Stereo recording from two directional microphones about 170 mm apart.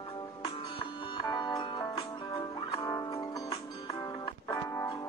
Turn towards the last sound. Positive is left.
turn(degrees=20)  # may be behind; listen again after turning